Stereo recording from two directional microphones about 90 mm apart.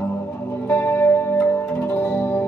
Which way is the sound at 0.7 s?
25° left (ahead or behind).